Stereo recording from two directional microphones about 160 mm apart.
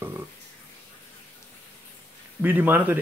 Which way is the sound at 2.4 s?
10° right (ahead or behind).